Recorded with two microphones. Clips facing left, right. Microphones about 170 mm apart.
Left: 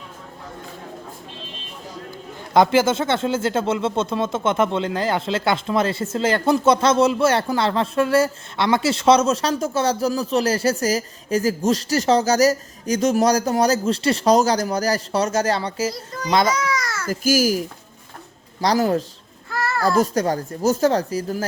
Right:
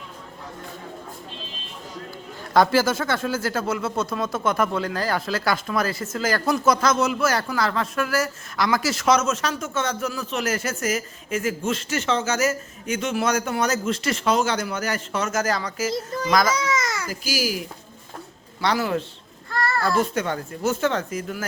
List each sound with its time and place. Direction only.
2.5 s speech: 20° left (ahead or behind)
15.9 s speech: 25° right (ahead or behind)
16.3 s speech: 30° left (ahead or behind)
16.6 s babbling: 20° right (ahead or behind)
17.1 s a child's voice: 45° left (ahead or behind)
19.5 s a sound: centre (ahead or behind)
20.0 s speech: 40° left (ahead or behind)